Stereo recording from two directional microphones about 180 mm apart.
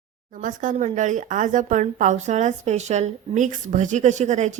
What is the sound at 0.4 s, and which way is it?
A woman's voice, 45° right (ahead or behind).